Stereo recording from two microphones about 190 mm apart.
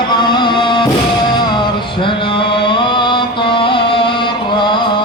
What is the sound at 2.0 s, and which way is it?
Chant, 25° left (ahead or behind).